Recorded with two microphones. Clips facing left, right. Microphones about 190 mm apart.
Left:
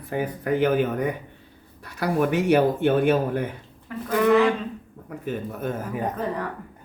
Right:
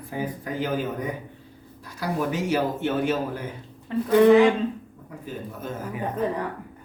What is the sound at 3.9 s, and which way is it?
Speech, 25° right (ahead or behind).